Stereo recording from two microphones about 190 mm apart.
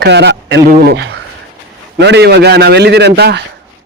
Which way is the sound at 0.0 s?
65° right (ahead or behind).